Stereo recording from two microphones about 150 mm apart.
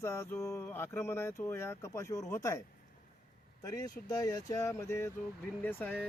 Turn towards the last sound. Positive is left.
turn(degrees=10)  # may be behind; listen again after turning